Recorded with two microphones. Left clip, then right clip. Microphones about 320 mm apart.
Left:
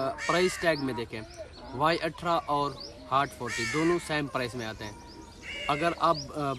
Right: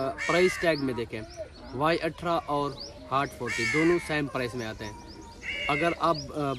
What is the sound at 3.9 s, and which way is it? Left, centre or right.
A man's voice, centre.